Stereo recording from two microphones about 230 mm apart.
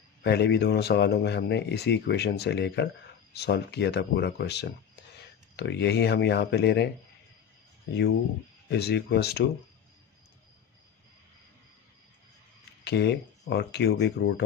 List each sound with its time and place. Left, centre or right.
0.2 s speech: left
8.6 s speech: left
12.8 s speech: left